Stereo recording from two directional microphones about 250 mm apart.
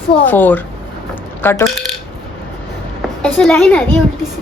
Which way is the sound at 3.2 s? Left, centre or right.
Centre.